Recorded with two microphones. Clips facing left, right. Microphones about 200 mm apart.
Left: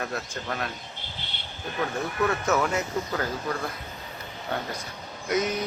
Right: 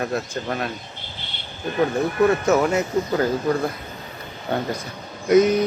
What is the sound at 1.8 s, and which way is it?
Speech, 30° right (ahead or behind).